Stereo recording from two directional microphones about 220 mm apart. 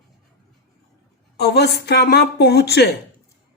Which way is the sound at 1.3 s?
50° left (ahead or behind).